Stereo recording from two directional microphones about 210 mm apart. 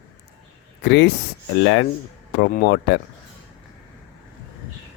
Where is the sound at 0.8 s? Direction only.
55° left (ahead or behind).